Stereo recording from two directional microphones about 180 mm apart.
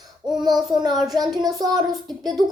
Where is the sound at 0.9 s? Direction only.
Centre (ahead or behind).